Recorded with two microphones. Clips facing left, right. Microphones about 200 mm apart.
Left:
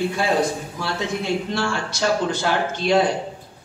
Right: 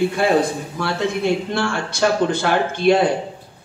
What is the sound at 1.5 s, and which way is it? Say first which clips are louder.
A man's voice: right 3 dB; 55° right (ahead or behind).